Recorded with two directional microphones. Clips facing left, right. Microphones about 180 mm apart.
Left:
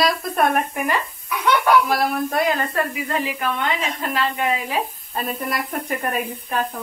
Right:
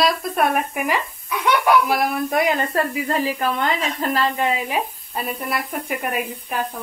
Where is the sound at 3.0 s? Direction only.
35° right (ahead or behind).